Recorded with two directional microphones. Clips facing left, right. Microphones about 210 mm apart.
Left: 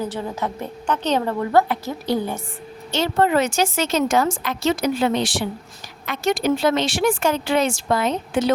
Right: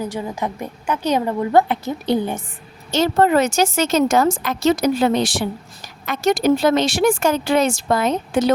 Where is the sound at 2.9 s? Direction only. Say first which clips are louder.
Right 3 dB; 40° right (ahead or behind).